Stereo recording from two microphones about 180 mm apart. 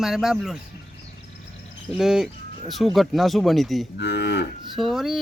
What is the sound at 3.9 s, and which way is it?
Moo, 70° left (ahead or behind).